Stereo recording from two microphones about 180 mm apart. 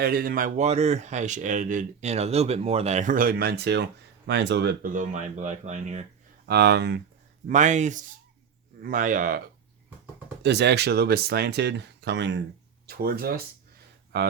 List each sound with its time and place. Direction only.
0.0 s speech: 55° right (ahead or behind)
6.4 s speech: 65° right (ahead or behind)
7.4 s speech: 45° right (ahead or behind)
10.4 s speech: 70° right (ahead or behind)
12.9 s speech: 55° right (ahead or behind)